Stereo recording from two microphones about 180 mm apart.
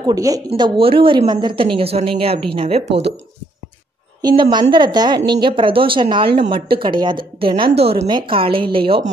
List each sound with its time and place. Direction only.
0.0 s a woman's voice: 20° right (ahead or behind)
4.2 s a woman's voice: 25° right (ahead or behind)